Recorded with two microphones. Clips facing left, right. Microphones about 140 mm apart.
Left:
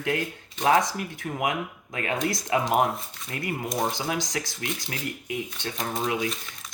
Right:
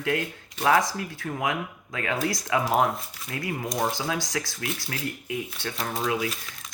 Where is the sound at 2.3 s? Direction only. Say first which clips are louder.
Left 1 dB; 25° left (ahead or behind).